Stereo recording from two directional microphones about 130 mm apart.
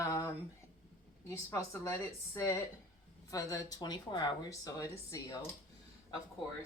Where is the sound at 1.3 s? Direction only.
25° left (ahead or behind).